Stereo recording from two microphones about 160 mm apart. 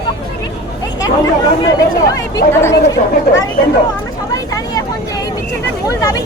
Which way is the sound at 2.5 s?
15° left (ahead or behind).